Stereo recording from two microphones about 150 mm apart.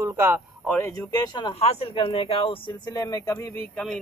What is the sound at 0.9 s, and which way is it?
Speech, 25° left (ahead or behind).